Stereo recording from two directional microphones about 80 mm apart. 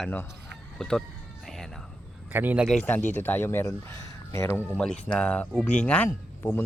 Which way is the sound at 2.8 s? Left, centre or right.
Left.